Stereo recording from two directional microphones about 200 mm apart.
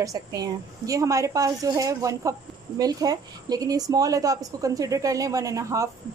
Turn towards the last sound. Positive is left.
turn(degrees=-15)  # may be behind; listen again after turning